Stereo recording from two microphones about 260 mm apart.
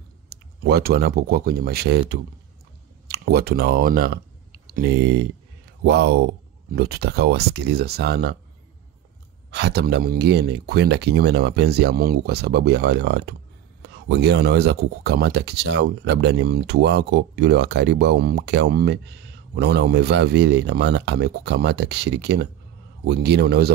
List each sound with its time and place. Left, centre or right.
0.3 s speech: right
9.5 s speech: right